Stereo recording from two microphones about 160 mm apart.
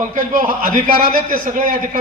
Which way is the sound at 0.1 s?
55° right (ahead or behind).